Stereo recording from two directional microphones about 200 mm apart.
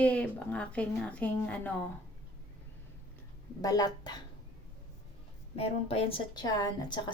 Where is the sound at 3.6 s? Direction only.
20° left (ahead or behind).